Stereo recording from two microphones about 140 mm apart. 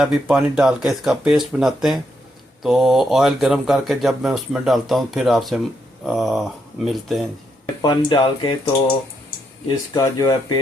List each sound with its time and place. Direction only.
0.0 s speech: 5° right (ahead or behind)
7.8 s speech: 30° left (ahead or behind)
9.6 s speech: 25° left (ahead or behind)